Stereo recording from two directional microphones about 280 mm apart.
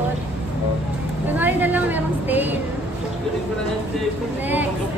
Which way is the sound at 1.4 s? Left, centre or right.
Centre.